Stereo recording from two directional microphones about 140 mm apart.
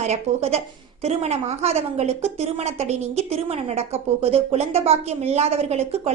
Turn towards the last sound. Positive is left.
turn(degrees=-45)  # may be behind; listen again after turning